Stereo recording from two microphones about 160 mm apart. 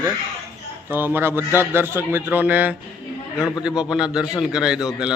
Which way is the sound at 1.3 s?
20° left (ahead or behind).